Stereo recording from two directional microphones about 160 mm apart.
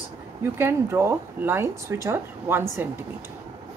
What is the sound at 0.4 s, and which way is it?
Speech, 15° right (ahead or behind).